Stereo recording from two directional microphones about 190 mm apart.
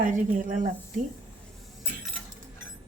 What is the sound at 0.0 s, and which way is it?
Speech, 45° right (ahead or behind).